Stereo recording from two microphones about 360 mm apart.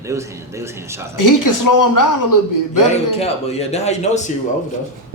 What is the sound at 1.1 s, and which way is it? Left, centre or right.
Speech, left.